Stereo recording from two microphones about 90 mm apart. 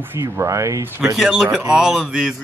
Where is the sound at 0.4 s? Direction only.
35° right (ahead or behind).